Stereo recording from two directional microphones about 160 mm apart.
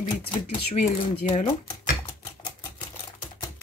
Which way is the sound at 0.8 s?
45° left (ahead or behind).